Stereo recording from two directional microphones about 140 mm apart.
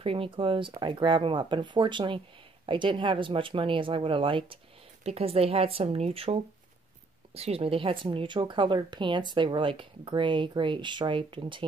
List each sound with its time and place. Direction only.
0.0 s speech: 40° right (ahead or behind)